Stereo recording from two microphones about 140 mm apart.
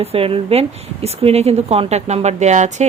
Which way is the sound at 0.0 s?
45° right (ahead or behind).